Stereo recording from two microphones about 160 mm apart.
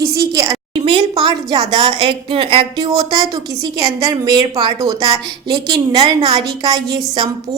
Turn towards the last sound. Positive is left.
turn(degrees=-25)  # may be behind; listen again after turning